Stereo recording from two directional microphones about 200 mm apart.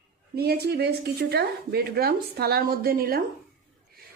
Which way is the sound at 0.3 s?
55° right (ahead or behind).